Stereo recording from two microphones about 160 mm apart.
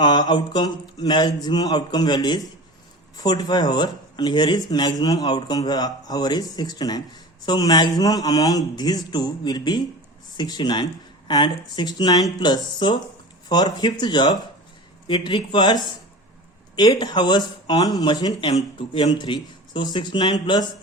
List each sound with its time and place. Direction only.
0.0 s speech: 25° left (ahead or behind)